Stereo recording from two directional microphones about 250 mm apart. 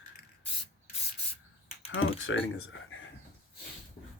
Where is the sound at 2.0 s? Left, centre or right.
Left.